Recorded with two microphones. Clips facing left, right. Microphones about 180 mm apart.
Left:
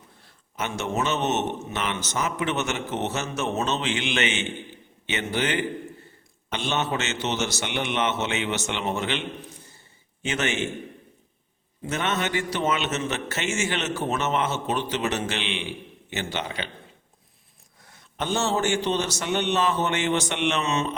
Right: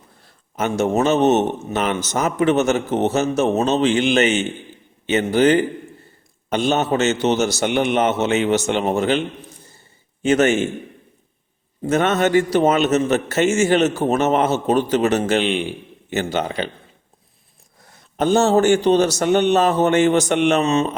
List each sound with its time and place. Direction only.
0.5 s a man's voice: 40° right (ahead or behind)
10.2 s a man's voice: 40° right (ahead or behind)
11.8 s a man's voice: 45° right (ahead or behind)
17.8 s a man's voice: 40° right (ahead or behind)